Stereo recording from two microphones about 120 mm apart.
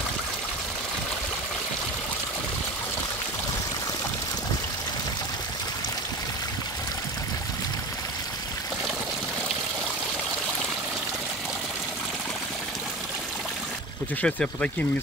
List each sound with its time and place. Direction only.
14.2 s speech: 10° left (ahead or behind)